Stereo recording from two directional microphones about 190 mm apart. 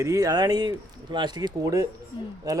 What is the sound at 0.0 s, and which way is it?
A man's voice, 20° right (ahead or behind).